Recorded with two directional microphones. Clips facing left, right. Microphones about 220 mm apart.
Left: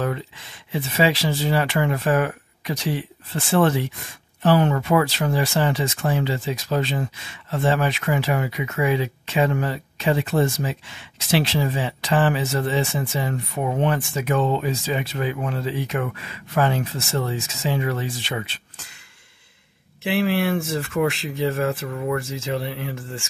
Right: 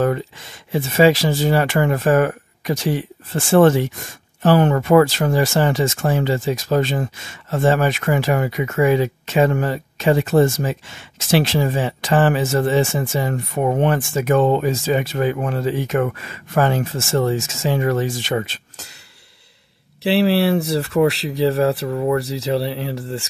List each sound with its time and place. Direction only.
0.0 s speech: 45° right (ahead or behind)
20.0 s speech: 35° right (ahead or behind)